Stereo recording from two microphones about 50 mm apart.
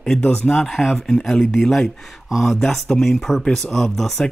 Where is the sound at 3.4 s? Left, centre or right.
Centre.